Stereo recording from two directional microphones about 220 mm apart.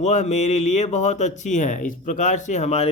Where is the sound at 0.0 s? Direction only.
30° left (ahead or behind).